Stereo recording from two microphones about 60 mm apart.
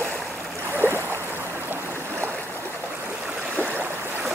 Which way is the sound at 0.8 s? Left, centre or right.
Left.